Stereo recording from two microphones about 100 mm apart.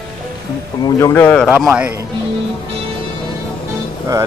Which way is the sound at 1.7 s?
15° right (ahead or behind).